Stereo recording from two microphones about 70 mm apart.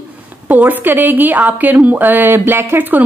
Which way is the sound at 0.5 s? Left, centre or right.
Right.